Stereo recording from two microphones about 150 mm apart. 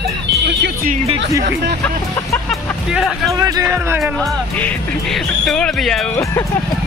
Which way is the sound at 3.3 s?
20° right (ahead or behind).